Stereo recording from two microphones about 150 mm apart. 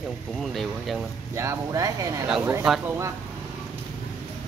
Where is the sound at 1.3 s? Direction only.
20° right (ahead or behind).